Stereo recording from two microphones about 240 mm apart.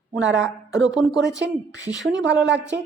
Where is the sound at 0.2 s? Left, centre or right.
Right.